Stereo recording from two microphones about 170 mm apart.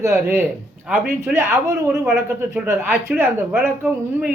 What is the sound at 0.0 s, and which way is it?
A man's voice, 15° right (ahead or behind).